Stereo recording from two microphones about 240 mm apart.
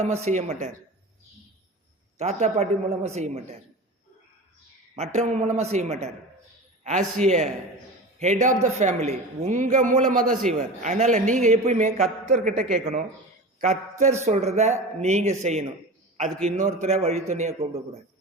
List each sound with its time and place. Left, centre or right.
0.0 s speech: right
2.1 s speech: right
4.9 s a man's voice: right